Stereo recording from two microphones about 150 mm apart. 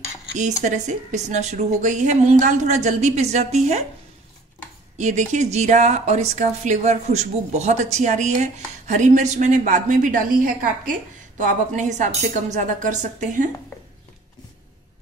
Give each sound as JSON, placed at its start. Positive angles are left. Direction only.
{"t": 0.4, "sound": "speech", "side_deg": -50}
{"t": 4.9, "sound": "speech", "side_deg": -50}